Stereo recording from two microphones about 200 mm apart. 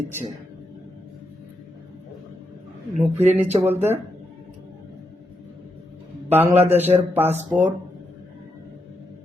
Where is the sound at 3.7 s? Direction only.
10° right (ahead or behind).